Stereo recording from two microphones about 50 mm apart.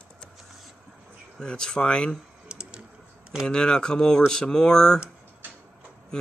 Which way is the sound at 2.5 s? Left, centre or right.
Centre.